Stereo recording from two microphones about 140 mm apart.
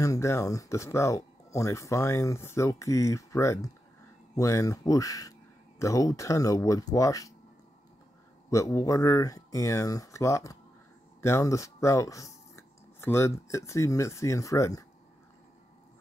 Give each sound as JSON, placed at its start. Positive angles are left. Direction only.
{"t": 0.0, "sound": "speech", "side_deg": 20}
{"t": 8.5, "sound": "speech", "side_deg": 20}